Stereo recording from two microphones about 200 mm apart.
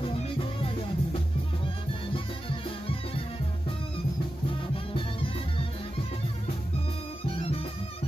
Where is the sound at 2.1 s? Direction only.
25° left (ahead or behind).